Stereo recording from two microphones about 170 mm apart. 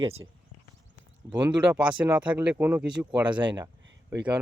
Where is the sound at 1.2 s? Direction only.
20° right (ahead or behind).